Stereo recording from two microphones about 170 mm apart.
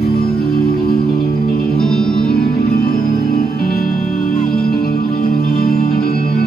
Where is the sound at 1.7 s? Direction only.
Centre (ahead or behind).